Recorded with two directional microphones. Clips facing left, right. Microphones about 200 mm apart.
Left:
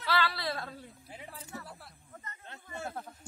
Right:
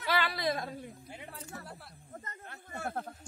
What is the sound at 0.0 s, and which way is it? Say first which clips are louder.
Whimper: right 1 dB; 15° right (ahead or behind).